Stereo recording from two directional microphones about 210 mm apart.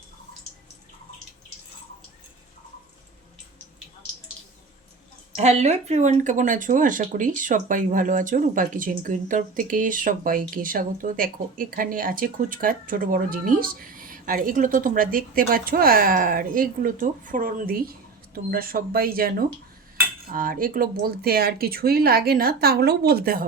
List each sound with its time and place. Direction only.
5.3 s speech: 30° right (ahead or behind)